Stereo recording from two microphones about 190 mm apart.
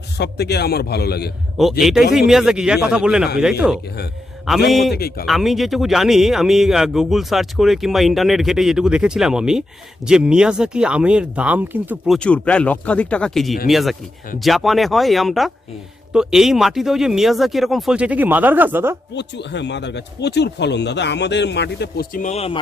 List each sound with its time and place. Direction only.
0.2 s speech: 60° left (ahead or behind)
1.8 s speech: centre (ahead or behind)
4.9 s speech: 55° left (ahead or behind)
5.2 s speech: centre (ahead or behind)
19.1 s speech: 65° left (ahead or behind)
22.2 s speech: 35° left (ahead or behind)